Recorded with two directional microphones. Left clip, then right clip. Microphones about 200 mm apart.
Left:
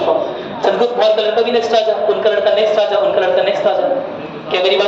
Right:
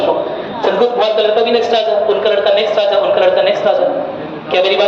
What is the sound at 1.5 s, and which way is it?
A woman's voice, 5° right (ahead or behind).